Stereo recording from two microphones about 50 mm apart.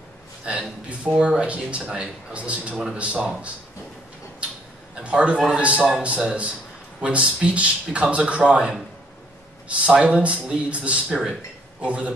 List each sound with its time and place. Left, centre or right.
0.5 s speech: right
4.9 s speech: right
9.8 s speech: right